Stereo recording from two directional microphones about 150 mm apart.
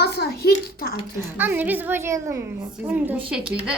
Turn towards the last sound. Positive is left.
turn(degrees=-10)  # may be behind; listen again after turning